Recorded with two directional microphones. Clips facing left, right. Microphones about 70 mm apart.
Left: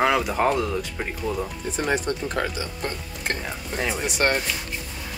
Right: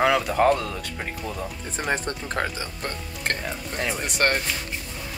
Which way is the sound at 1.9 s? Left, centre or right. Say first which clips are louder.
Left 1 dB; right.